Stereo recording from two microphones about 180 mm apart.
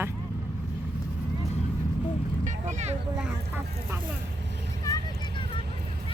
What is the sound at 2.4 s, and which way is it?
Vehicle, 45° right (ahead or behind).